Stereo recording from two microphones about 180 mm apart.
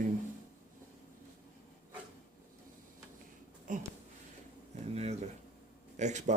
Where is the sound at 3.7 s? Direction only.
45° right (ahead or behind).